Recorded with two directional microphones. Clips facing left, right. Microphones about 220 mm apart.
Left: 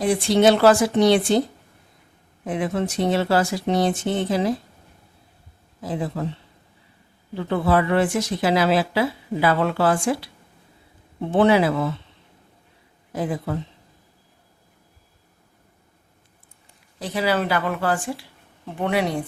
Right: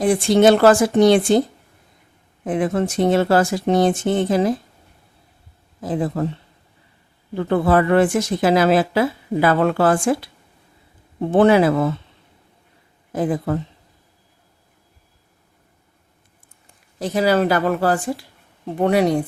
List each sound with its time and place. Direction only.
0.0 s speech: 50° right (ahead or behind)
2.4 s speech: 50° right (ahead or behind)
5.8 s speech: 50° right (ahead or behind)
7.3 s speech: 50° right (ahead or behind)
13.1 s speech: 50° right (ahead or behind)
17.0 s speech: 45° right (ahead or behind)